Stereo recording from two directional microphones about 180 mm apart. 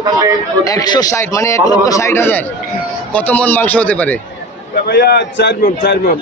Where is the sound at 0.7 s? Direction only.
20° left (ahead or behind).